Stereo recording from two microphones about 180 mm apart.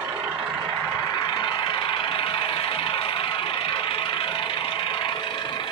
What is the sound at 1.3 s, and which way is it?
Vehicle, 25° left (ahead or behind).